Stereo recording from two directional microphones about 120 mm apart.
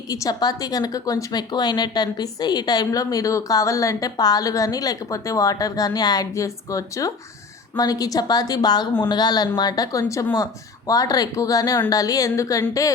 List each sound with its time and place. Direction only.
0.1 s a woman's voice: 30° left (ahead or behind)